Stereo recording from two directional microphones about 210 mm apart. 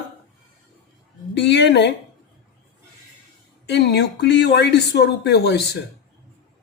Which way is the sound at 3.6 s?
55° left (ahead or behind).